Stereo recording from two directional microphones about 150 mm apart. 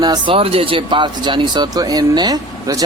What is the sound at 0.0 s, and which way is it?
Speech, 30° right (ahead or behind).